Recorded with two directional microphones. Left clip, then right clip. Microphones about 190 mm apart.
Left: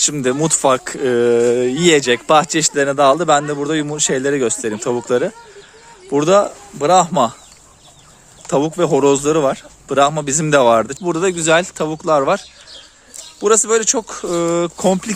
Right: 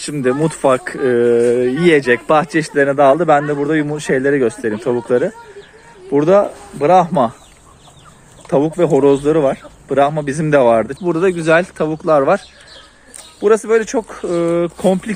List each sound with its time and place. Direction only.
0.0 s speech: 25° left (ahead or behind)
8.4 s speech: 20° left (ahead or behind)
13.4 s speech: 20° left (ahead or behind)